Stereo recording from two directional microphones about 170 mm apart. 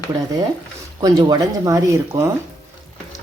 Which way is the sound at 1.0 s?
20° right (ahead or behind).